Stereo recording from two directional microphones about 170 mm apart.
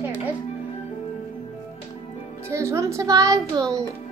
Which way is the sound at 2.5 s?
15° right (ahead or behind).